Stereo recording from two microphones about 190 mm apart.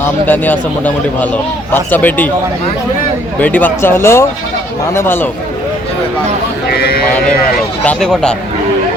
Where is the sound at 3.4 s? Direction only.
10° left (ahead or behind).